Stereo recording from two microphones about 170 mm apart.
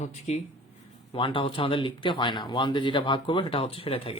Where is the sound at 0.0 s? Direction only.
40° left (ahead or behind).